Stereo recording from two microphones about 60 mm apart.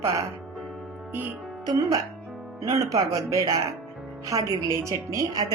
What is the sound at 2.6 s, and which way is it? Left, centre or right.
Speech, right.